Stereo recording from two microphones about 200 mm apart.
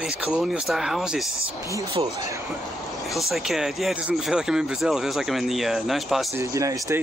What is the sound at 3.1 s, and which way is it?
Speech, centre (ahead or behind).